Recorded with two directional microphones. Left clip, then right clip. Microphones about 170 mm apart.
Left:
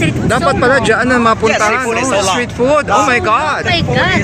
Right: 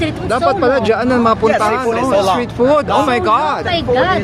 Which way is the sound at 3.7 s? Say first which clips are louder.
Even; 70° right (ahead or behind).